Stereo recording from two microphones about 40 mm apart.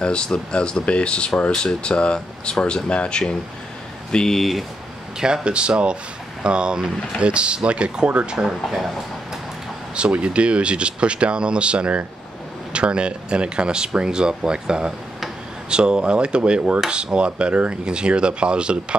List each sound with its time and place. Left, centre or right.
0.0 s speech: left
4.3 s speech: centre
5.2 s speech: right
9.9 s speech: right